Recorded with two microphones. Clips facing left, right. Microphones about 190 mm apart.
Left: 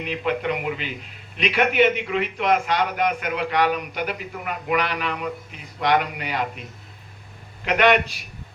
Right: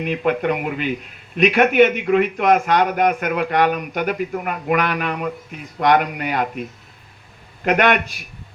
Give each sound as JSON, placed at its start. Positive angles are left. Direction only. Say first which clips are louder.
{"t": 0.0, "sound": "a man's voice", "louder": "right 5 dB", "side_deg": -50}